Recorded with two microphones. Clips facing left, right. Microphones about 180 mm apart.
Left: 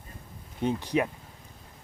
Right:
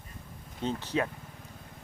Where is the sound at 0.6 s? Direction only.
15° left (ahead or behind).